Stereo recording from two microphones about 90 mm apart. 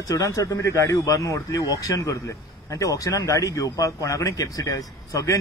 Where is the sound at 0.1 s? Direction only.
40° left (ahead or behind).